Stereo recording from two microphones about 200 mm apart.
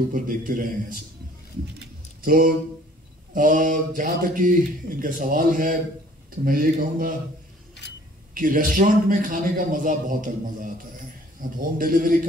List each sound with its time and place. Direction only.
0.1 s speech: 45° right (ahead or behind)
2.2 s speech: 45° right (ahead or behind)
8.4 s speech: 45° right (ahead or behind)